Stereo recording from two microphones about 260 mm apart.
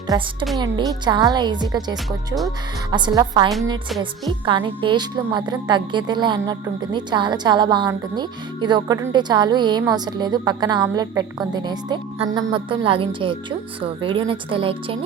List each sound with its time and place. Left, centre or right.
0.1 s a woman's voice: centre